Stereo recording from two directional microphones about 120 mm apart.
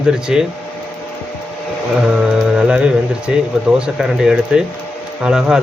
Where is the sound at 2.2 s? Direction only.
5° right (ahead or behind).